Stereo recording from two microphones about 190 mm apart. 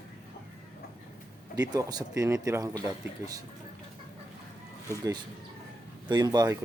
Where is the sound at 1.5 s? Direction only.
20° right (ahead or behind).